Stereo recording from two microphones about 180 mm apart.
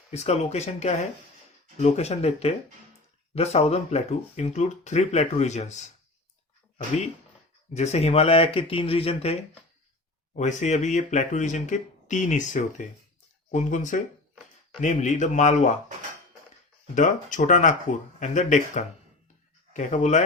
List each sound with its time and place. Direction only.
0.1 s speech: 35° left (ahead or behind)
7.7 s speech: 40° left (ahead or behind)
16.9 s speech: 45° left (ahead or behind)